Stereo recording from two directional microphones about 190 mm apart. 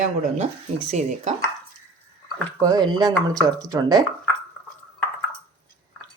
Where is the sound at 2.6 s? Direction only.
20° right (ahead or behind).